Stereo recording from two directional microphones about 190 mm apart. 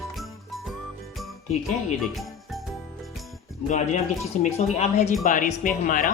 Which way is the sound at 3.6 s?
40° left (ahead or behind).